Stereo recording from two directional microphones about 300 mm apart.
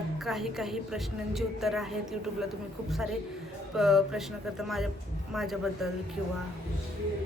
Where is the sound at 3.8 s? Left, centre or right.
Centre.